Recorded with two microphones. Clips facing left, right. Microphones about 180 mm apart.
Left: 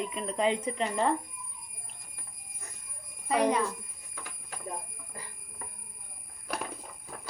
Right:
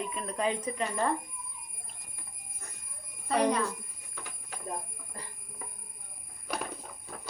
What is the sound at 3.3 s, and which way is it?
Speech, 10° left (ahead or behind).